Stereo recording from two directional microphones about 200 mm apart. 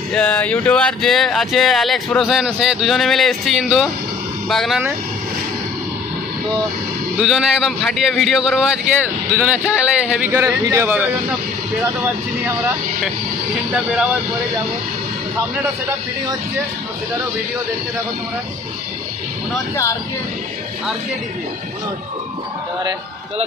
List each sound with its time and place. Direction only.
0.1 s speech: 5° left (ahead or behind)
7.2 s speech: 5° right (ahead or behind)
19.7 s speech: 15° left (ahead or behind)